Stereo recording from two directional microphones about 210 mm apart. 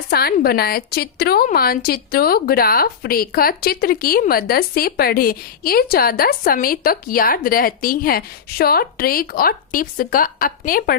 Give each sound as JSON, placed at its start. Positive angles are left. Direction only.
{"t": 0.1, "sound": "a woman's voice", "side_deg": 45}